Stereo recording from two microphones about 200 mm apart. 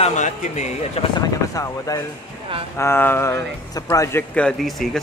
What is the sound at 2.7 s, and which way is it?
A man's voice, 10° left (ahead or behind).